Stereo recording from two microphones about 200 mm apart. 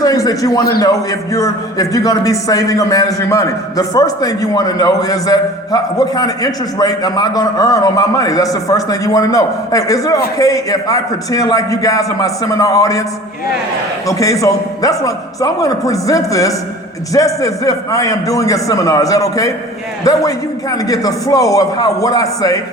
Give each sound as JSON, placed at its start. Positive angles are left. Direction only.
{"t": 0.0, "sound": "a sound", "side_deg": 20}
{"t": 0.8, "sound": "a man's voice", "side_deg": 15}
{"t": 14.1, "sound": "a man's voice", "side_deg": 15}